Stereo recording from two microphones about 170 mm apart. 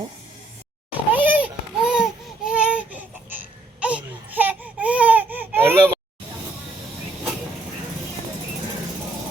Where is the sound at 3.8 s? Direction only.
10° right (ahead or behind).